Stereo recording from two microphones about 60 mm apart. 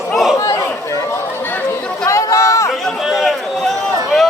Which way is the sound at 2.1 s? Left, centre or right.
Left.